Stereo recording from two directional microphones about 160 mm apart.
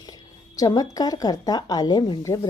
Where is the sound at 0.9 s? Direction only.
25° left (ahead or behind).